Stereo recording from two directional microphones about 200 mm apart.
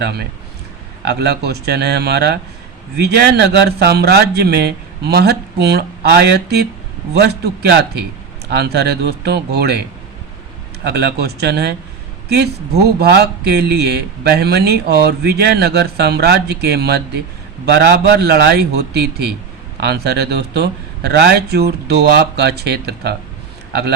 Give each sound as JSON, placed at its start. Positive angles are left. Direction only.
{"t": 0.0, "sound": "a man's voice", "side_deg": -55}
{"t": 10.8, "sound": "a man's voice", "side_deg": -55}